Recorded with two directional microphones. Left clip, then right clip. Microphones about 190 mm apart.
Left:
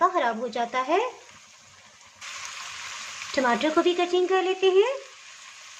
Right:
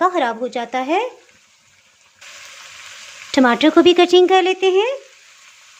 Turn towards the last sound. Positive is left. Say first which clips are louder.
# right 6 dB
turn(degrees=-40)  # may be behind; listen again after turning